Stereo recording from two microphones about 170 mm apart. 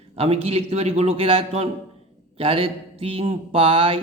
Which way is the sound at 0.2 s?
35° right (ahead or behind).